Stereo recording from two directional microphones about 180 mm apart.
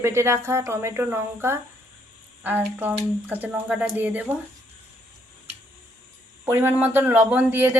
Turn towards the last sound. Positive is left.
turn(degrees=-10)  # may be behind; listen again after turning